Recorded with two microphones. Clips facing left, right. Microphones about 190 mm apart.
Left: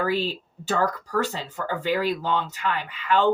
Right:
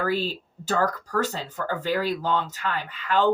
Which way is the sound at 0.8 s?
40° right (ahead or behind).